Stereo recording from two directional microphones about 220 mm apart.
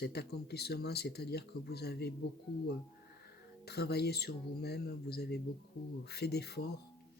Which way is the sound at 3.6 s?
45° left (ahead or behind).